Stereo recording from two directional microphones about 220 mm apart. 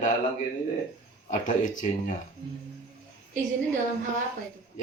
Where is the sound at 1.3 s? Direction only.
35° left (ahead or behind).